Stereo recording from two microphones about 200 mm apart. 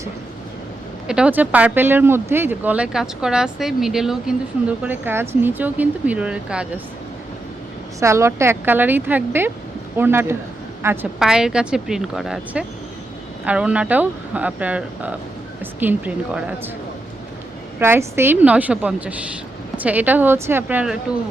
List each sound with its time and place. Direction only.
1.0 s speech: 5° right (ahead or behind)
7.9 s speech: 15° right (ahead or behind)
17.7 s speech: 10° right (ahead or behind)